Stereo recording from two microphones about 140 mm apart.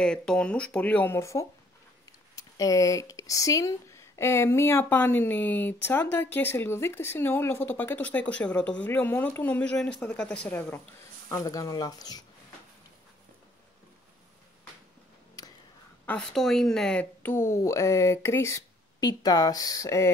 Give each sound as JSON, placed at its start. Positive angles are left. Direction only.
{"t": 0.0, "sound": "speech", "side_deg": 5}
{"t": 11.2, "sound": "speech", "side_deg": 25}
{"t": 16.1, "sound": "speech", "side_deg": 5}